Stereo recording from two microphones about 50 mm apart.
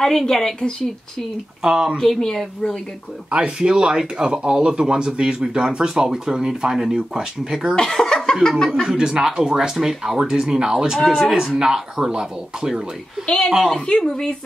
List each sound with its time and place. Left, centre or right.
0.0 s speech: centre
1.6 s speech: centre
2.0 s speech: centre
3.3 s speech: right
7.7 s laughter: centre
8.4 s speech: centre
8.8 s speech: centre
13.7 s speech: centre